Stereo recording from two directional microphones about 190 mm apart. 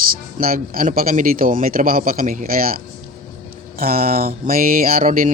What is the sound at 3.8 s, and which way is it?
Speech, 50° right (ahead or behind).